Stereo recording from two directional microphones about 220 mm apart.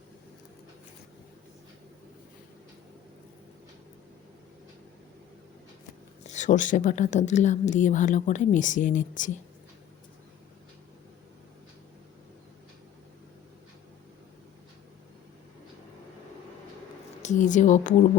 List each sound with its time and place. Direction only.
6.2 s a woman's voice: 35° left (ahead or behind)
17.2 s a woman's voice: 35° left (ahead or behind)